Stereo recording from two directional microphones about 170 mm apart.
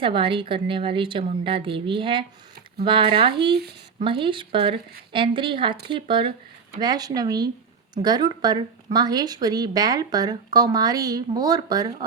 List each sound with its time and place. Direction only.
0.0 s a woman's voice: 30° right (ahead or behind)